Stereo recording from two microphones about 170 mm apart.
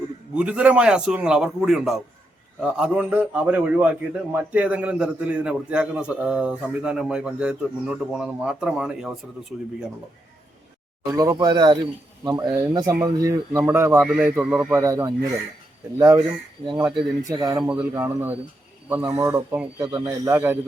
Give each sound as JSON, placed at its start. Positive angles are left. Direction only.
{"t": 0.3, "sound": "a man's voice", "side_deg": -5}
{"t": 11.1, "sound": "a man's voice", "side_deg": -20}
{"t": 16.7, "sound": "speech", "side_deg": -15}
{"t": 17.6, "sound": "a man's voice", "side_deg": -10}